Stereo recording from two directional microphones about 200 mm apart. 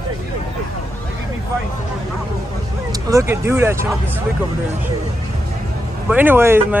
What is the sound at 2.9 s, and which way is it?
Speech, 15° right (ahead or behind).